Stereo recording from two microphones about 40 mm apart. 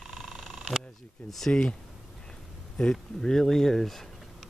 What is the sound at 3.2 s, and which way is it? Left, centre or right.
Speech, centre.